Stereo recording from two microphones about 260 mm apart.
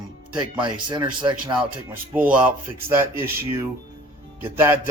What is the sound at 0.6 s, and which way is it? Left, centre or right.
Mantra, centre.